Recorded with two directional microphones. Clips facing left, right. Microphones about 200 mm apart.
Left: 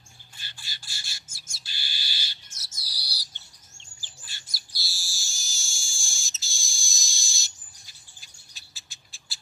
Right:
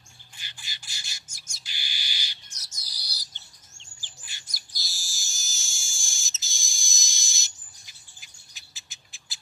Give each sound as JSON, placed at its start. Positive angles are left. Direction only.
{"t": 0.4, "sound": "bird", "side_deg": -15}
{"t": 4.5, "sound": "bird", "side_deg": -20}